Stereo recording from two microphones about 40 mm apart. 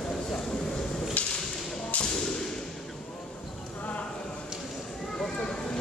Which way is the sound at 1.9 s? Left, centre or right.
Left.